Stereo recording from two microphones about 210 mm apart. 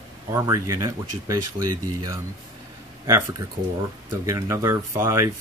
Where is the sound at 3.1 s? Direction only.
15° right (ahead or behind).